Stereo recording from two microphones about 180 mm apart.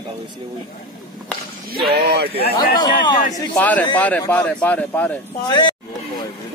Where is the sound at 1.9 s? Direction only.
60° right (ahead or behind).